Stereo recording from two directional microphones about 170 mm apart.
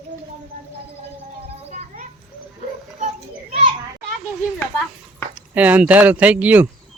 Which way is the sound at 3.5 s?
35° right (ahead or behind).